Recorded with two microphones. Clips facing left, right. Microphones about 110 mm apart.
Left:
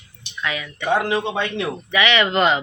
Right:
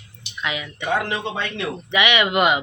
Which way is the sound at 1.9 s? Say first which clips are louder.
Left 1 dB; 15° right (ahead or behind).